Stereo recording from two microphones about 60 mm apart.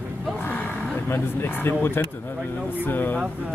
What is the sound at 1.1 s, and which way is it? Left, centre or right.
Speech, left.